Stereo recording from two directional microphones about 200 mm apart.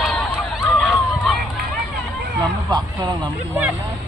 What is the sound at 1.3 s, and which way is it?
Run, centre (ahead or behind).